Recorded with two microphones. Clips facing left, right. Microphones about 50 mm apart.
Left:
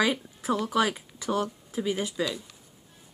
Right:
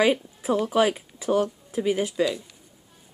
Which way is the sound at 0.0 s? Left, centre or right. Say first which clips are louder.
Right 5 dB; centre.